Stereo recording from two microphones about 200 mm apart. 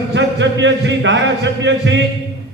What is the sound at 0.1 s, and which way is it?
A man's voice, 65° right (ahead or behind).